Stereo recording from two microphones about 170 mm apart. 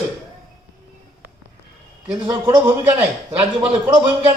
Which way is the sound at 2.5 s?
10° right (ahead or behind).